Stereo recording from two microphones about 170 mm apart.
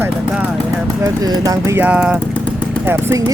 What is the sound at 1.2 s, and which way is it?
Speech, 20° right (ahead or behind).